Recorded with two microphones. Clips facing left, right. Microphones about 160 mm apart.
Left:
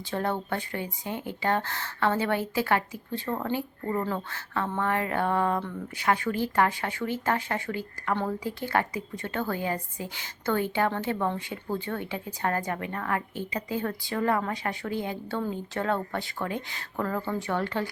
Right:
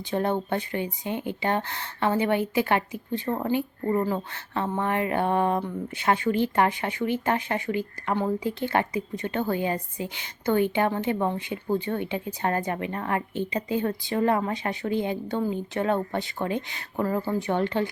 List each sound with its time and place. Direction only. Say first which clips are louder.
0.1 s a woman's voice: right 4 dB; 20° right (ahead or behind)